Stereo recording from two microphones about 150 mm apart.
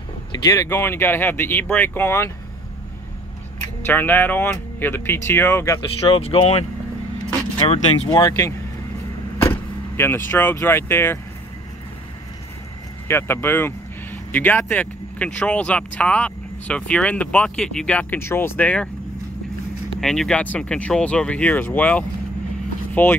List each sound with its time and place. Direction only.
0.3 s a sound: 25° left (ahead or behind)
0.7 s speech: 15° left (ahead or behind)
3.8 s speech: 10° left (ahead or behind)
6.0 s speech: 40° left (ahead or behind)
8.1 s speech: 25° left (ahead or behind)
13.1 s speech: 15° left (ahead or behind)
20.0 s speech: 5° left (ahead or behind)